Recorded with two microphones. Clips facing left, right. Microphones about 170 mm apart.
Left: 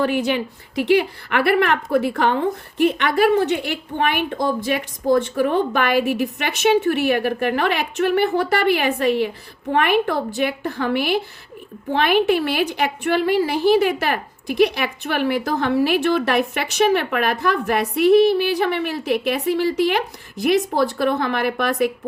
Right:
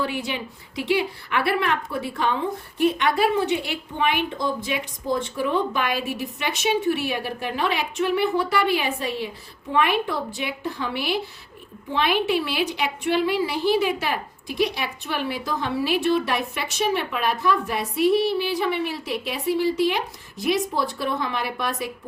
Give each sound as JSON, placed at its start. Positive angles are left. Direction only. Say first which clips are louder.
{"t": 0.0, "sound": "a woman's voice", "louder": "left 7 dB", "side_deg": 65}
{"t": 15.7, "sound": "a woman's voice", "louder": "left 3 dB", "side_deg": 55}